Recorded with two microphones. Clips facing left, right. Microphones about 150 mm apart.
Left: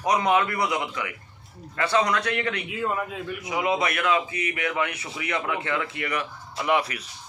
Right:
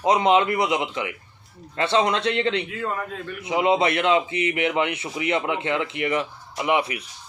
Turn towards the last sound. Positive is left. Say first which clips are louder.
# right 2 dB
turn(degrees=-20)  # may be behind; listen again after turning